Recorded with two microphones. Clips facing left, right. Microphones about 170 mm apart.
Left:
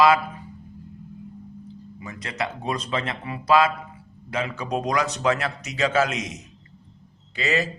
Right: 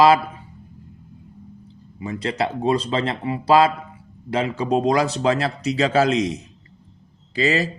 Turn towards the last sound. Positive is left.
turn(degrees=-35)  # may be behind; listen again after turning